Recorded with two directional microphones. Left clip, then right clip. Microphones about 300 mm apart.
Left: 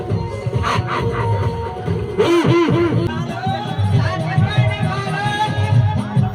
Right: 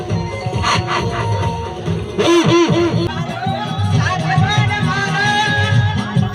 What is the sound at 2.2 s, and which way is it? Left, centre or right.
Music, right.